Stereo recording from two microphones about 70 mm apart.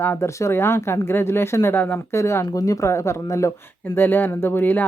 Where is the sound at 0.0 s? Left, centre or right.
Left.